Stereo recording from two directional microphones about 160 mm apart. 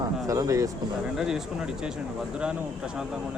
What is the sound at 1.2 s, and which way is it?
Speech, 5° right (ahead or behind).